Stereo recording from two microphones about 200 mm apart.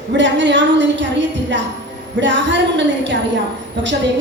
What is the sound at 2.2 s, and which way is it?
Speech, 65° right (ahead or behind).